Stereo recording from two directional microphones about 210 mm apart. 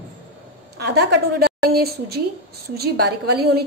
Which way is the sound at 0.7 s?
50° right (ahead or behind).